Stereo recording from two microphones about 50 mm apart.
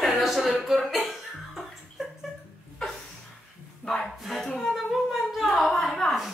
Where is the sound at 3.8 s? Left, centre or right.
Centre.